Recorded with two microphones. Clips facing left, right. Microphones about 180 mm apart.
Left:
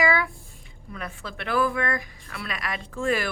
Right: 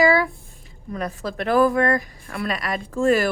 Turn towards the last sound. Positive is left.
turn(degrees=-40)  # may be behind; listen again after turning